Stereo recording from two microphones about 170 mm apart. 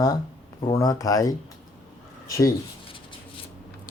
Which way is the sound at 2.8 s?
30° left (ahead or behind).